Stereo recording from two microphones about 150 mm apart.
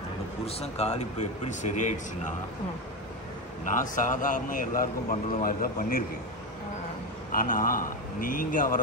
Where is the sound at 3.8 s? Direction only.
60° left (ahead or behind).